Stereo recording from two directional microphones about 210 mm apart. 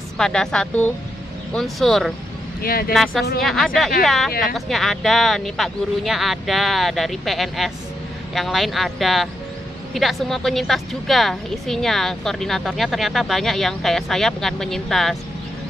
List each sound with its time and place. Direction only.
0.2 s a woman's voice: 5° left (ahead or behind)
2.6 s speech: 45° left (ahead or behind)
2.9 s a woman's voice: centre (ahead or behind)